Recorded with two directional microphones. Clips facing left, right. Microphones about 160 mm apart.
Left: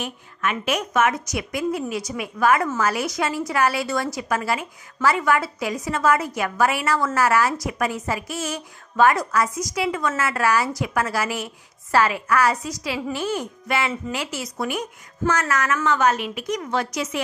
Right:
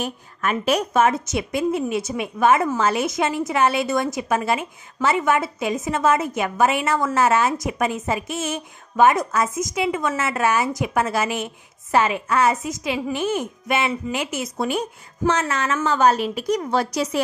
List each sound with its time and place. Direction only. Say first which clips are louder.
0.0 s a woman's voice: right 2 dB; 40° right (ahead or behind)